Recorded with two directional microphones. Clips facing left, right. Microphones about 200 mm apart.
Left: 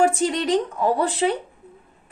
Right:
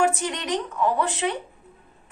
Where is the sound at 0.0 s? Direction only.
30° left (ahead or behind).